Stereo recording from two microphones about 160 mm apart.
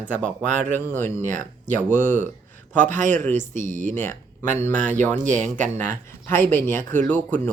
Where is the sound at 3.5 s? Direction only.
50° right (ahead or behind).